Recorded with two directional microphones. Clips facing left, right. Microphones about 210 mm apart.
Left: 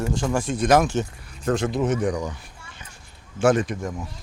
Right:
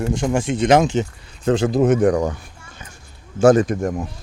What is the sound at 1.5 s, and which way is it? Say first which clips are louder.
Speech: right 5 dB; 35° right (ahead or behind).